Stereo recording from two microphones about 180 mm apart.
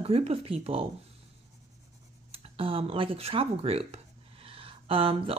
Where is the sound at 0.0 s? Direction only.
35° right (ahead or behind).